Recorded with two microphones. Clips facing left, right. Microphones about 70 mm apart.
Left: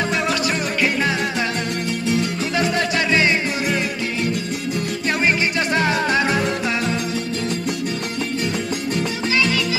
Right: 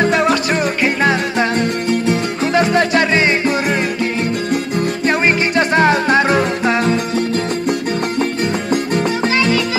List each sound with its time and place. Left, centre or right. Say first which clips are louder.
0.0 s music: right 7 dB; right